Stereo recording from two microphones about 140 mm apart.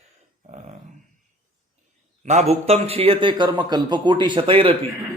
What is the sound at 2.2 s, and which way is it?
A man's voice, 50° right (ahead or behind).